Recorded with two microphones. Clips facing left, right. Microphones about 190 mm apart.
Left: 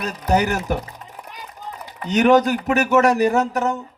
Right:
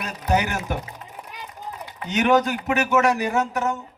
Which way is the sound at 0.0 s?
40° left (ahead or behind).